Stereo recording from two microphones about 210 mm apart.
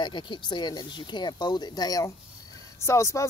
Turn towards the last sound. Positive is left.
turn(degrees=15)  # may be behind; listen again after turning